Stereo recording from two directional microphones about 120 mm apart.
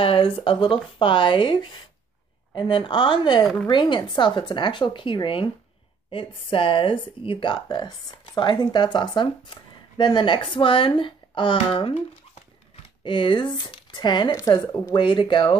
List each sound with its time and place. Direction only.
0.0 s a woman's voice: 50° left (ahead or behind)
13.0 s a woman's voice: 45° left (ahead or behind)
14.3 s speech: 30° left (ahead or behind)
15.0 s speech: 40° left (ahead or behind)